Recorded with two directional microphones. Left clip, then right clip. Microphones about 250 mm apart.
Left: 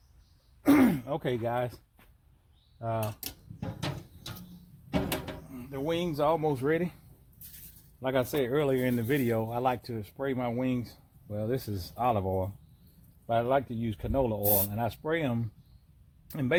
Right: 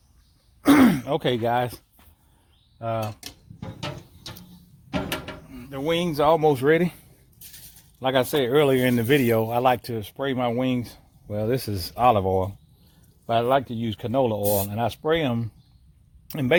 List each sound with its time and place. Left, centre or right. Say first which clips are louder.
0.6 s throat clearing: right 6 dB; right
2.7 s speech: right 5 dB; right
5.7 s speech: right 7 dB; right
8.0 s speech: right 7 dB; right